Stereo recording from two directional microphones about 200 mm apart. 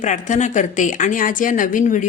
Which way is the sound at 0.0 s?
35° left (ahead or behind).